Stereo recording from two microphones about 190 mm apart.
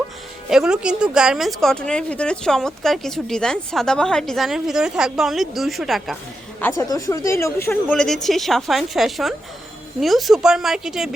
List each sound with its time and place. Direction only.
0.5 s speech: 5° right (ahead or behind)
6.6 s speech: 15° left (ahead or behind); by 11.1 s centre (ahead or behind)